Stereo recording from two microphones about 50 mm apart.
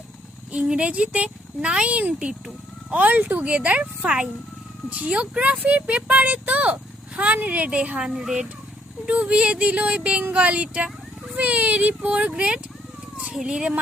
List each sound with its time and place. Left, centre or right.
0.5 s speech: right
2.9 s speech: right; by 8.4 s centre
9.0 s speech: right